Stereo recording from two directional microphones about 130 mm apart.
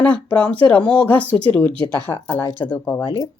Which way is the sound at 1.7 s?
40° right (ahead or behind).